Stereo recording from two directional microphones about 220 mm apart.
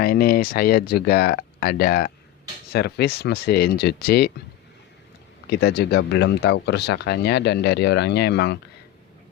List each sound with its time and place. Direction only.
0.0 s speech: 45° left (ahead or behind)
5.5 s speech: 50° left (ahead or behind)